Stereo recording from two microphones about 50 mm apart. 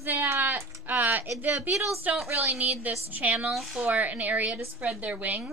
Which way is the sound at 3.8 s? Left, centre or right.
Right.